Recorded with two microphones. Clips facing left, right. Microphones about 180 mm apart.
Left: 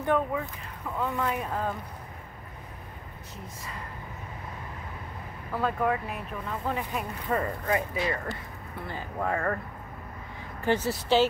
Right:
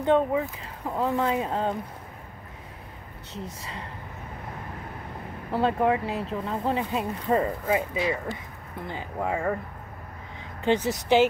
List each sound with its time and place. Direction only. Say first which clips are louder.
0.0 s speech: right 5 dB; 25° right (ahead or behind)
5.5 s speech: right 4 dB; 25° right (ahead or behind)
7.6 s speech: right 3 dB; 10° right (ahead or behind)
10.6 s speech: right 3 dB; 20° right (ahead or behind)